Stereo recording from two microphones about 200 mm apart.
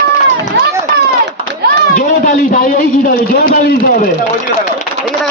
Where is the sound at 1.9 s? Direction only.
45° left (ahead or behind).